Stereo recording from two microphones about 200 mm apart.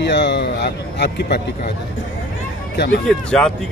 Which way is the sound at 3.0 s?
Centre (ahead or behind).